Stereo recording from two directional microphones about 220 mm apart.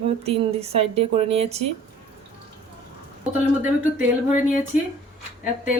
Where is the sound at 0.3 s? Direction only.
25° right (ahead or behind).